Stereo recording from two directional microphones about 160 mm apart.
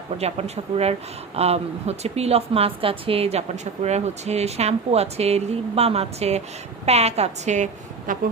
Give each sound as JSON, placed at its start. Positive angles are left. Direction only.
{"t": 0.2, "sound": "a woman's voice", "side_deg": -40}